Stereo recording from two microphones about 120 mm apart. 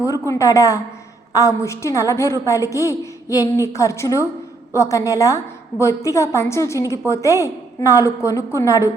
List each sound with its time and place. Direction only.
0.0 s a woman's voice: 25° left (ahead or behind)